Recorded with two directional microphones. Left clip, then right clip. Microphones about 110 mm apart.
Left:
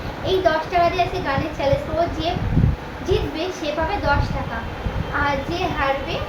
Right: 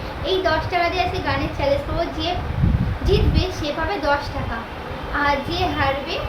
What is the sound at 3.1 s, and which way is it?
A woman's voice, 10° right (ahead or behind).